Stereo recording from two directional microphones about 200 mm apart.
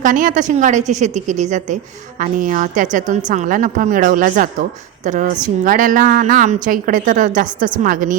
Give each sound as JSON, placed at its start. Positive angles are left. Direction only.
{"t": 0.0, "sound": "a woman's voice", "side_deg": -40}